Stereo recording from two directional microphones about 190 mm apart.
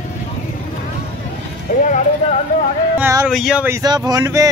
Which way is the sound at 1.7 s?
45° left (ahead or behind).